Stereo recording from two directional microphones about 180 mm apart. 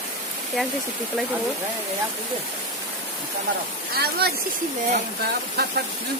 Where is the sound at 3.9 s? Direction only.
60° right (ahead or behind).